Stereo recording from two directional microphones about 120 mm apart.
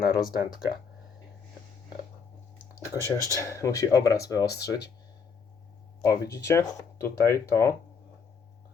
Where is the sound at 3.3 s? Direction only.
25° left (ahead or behind).